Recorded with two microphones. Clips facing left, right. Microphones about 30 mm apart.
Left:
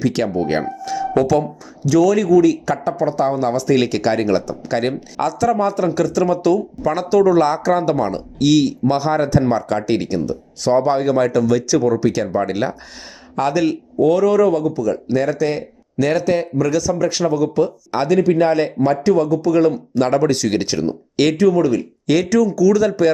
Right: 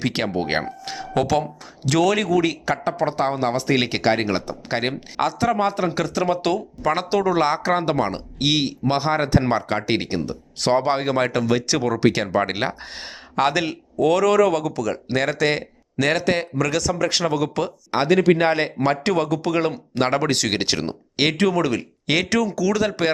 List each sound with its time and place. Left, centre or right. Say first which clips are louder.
0.0 s speech: left 5 dB; right
1.9 s speech: left 5 dB; right
2.5 s speech: left 5 dB; right
11.9 s speech: left 2 dB; right
13.3 s speech: left 2 dB; right
14.0 s speech: left 3 dB; right
15.1 s speech: left 1 dB; right
18.4 s speech: left 3 dB; right
19.0 s speech: left 6 dB; right
19.5 s speech: left 7 dB; right
21.3 s speech: left 5 dB; right
22.0 s speech: left 5 dB; right